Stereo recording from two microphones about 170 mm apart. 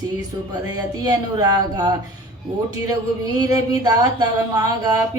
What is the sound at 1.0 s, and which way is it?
Speech, 20° right (ahead or behind).